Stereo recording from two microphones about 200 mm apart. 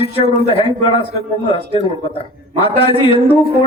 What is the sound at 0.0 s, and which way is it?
A man's voice, 30° left (ahead or behind).